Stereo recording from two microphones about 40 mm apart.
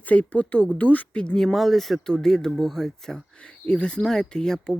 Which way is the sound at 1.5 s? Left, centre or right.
Centre.